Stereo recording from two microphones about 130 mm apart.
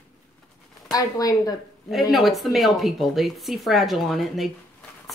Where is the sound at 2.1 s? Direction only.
Centre (ahead or behind).